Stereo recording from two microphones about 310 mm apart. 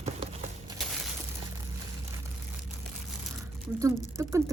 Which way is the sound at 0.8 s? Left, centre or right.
Centre.